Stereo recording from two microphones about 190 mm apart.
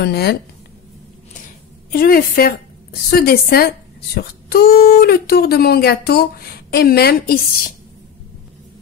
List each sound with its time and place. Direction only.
0.0 s speech: 55° left (ahead or behind)
1.9 s a woman's voice: 50° left (ahead or behind)